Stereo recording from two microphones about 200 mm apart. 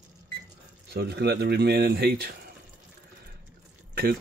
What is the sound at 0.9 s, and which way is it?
Speech, 55° right (ahead or behind).